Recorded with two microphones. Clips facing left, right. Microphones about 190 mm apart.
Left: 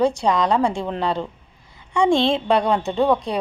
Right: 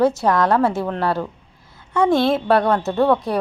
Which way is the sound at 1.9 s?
5° right (ahead or behind).